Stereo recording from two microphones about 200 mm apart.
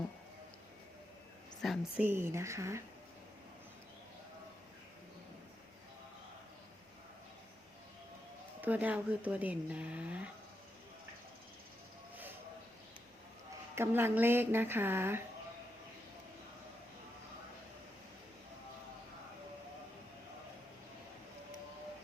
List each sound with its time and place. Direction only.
1.6 s a woman's voice: centre (ahead or behind)
2.0 s speech: 10° right (ahead or behind)
8.6 s speech: 10° right (ahead or behind)
13.7 s speech: 10° right (ahead or behind)